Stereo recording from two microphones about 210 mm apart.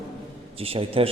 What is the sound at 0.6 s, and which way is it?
Speech, 25° right (ahead or behind).